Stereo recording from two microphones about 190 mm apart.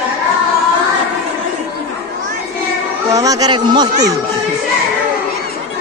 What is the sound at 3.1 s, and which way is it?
Speech, 20° right (ahead or behind).